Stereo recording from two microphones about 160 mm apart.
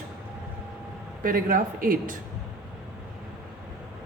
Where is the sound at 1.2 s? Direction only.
60° right (ahead or behind).